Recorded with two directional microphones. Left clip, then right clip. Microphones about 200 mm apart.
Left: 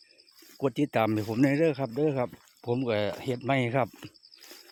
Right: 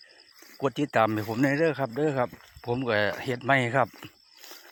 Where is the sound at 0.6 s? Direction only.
20° left (ahead or behind).